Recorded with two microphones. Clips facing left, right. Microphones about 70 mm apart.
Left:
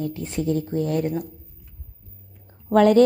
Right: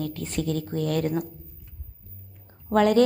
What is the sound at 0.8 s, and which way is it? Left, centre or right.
Speech, right.